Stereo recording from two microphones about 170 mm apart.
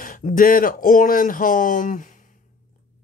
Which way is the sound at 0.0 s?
55° left (ahead or behind).